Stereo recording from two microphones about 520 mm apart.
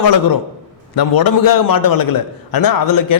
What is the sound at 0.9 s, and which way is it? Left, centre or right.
A man's voice, left.